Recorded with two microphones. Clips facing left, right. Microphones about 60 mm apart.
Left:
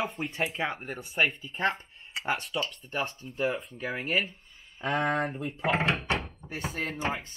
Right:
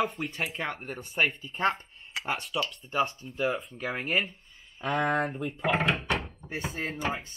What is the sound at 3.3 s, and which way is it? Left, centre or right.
Speech, centre.